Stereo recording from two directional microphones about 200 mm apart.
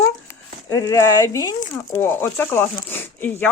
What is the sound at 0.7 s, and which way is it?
Speech, 15° left (ahead or behind).